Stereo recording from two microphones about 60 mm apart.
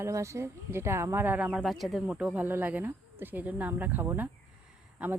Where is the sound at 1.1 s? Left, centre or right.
Right.